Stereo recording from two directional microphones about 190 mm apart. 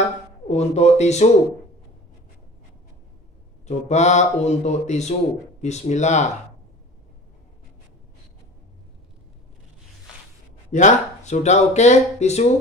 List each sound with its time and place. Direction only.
0.5 s speech: 35° left (ahead or behind)
3.6 s speech: 35° left (ahead or behind)
10.7 s speech: 40° left (ahead or behind)